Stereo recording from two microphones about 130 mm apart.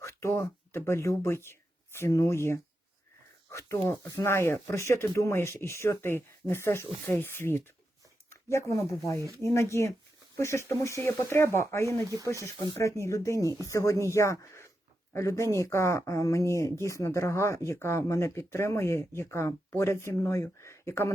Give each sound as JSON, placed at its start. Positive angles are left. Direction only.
{"t": 0.0, "sound": "speech", "side_deg": 20}